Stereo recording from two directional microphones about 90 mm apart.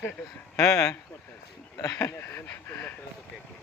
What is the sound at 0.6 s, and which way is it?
Speech, 35° left (ahead or behind).